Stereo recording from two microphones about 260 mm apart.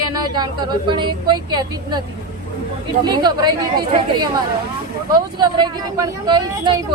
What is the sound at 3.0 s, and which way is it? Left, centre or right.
A woman's voice, centre.